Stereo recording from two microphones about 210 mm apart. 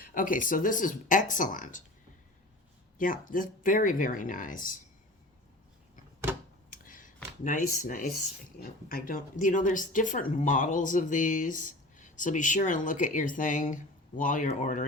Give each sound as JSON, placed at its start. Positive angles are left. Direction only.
{"t": 0.0, "sound": "speech", "side_deg": 40}
{"t": 3.0, "sound": "speech", "side_deg": 40}
{"t": 6.7, "sound": "a sound", "side_deg": 40}
{"t": 8.9, "sound": "speech", "side_deg": 40}